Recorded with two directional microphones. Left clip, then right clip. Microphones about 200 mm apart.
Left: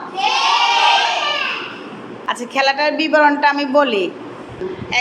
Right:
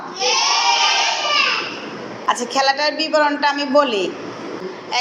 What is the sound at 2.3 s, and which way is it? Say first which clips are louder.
A woman's voice: even; 20° left (ahead or behind).